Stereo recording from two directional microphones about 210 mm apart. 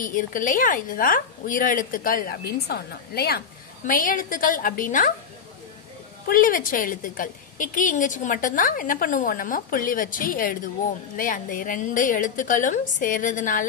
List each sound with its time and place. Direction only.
0.0 s a woman's voice: 40° left (ahead or behind)
6.2 s a woman's voice: 40° left (ahead or behind)